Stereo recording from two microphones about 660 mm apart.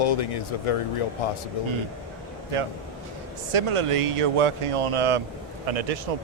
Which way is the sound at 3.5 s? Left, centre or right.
Right.